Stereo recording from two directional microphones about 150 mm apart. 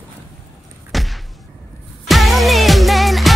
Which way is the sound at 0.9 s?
Centre (ahead or behind).